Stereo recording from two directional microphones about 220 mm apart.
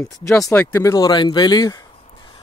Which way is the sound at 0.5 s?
10° left (ahead or behind).